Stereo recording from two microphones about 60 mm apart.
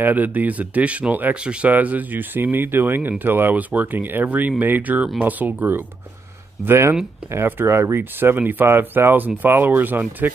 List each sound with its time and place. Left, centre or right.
0.0 s speech: right